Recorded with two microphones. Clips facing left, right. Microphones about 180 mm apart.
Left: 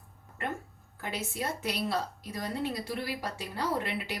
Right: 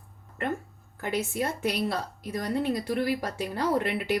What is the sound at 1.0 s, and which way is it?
Speech, 55° right (ahead or behind).